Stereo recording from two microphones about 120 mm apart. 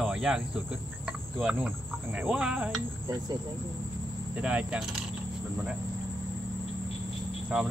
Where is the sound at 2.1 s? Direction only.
10° right (ahead or behind).